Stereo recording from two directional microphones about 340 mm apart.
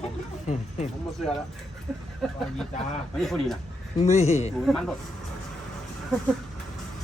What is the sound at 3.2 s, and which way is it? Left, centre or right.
Speech, centre.